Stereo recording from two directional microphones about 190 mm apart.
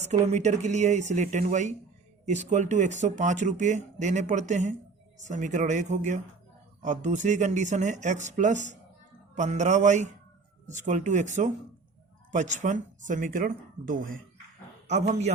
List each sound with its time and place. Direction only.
0.0 s a man's voice: 35° right (ahead or behind)